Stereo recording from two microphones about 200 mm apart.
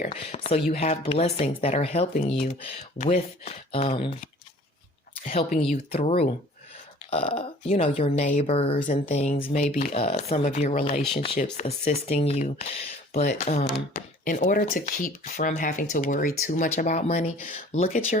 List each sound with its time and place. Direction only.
0.0 s speech: 30° left (ahead or behind)
5.2 s speech: 35° left (ahead or behind)